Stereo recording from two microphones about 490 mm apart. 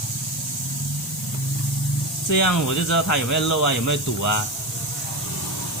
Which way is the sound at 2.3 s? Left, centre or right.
Left.